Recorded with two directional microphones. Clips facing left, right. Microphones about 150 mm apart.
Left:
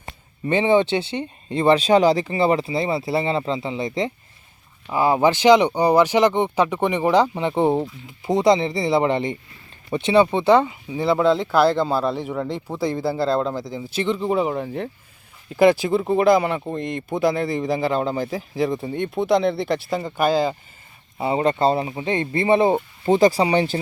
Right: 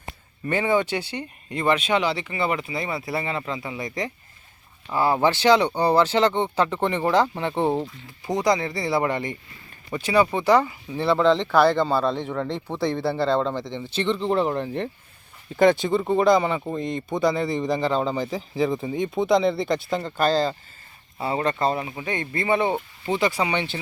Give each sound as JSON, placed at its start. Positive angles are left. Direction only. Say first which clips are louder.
{"t": 0.4, "sound": "speech", "louder": "left 5 dB", "side_deg": 25}
{"t": 4.9, "sound": "speech", "louder": "left 3 dB", "side_deg": 15}
{"t": 21.2, "sound": "speech", "louder": "left 4 dB", "side_deg": 20}